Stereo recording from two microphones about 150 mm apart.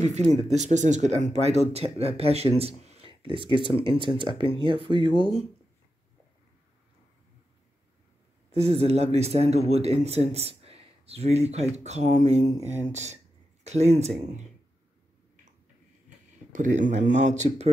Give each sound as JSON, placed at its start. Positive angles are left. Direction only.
{"t": 0.5, "sound": "speech", "side_deg": -50}
{"t": 3.4, "sound": "speech", "side_deg": 35}
{"t": 3.7, "sound": "speech", "side_deg": -35}
{"t": 8.5, "sound": "speech", "side_deg": -45}
{"t": 16.5, "sound": "speech", "side_deg": -55}